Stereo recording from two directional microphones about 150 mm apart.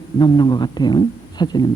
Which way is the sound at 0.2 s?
30° left (ahead or behind).